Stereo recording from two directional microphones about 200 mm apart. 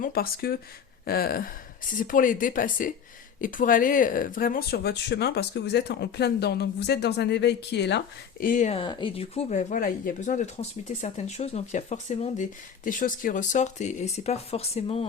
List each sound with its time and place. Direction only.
0.0 s speech: 50° left (ahead or behind)
8.8 s speech: 25° left (ahead or behind)